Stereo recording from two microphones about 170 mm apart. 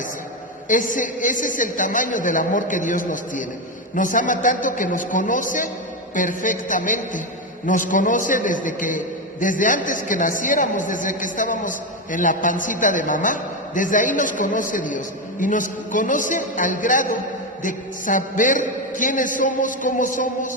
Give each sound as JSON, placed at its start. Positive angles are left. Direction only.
{"t": 0.7, "sound": "a man's voice", "side_deg": 50}